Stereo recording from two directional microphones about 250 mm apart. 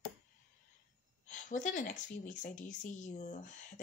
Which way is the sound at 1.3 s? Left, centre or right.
Left.